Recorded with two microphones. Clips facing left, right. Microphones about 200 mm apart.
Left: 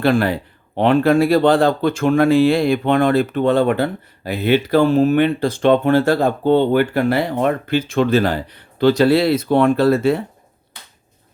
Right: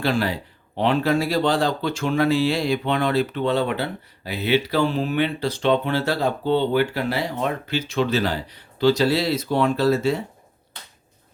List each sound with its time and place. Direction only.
0.0 s speech: 55° left (ahead or behind)